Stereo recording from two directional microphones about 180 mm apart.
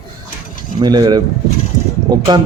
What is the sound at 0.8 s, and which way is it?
Speech, 20° right (ahead or behind).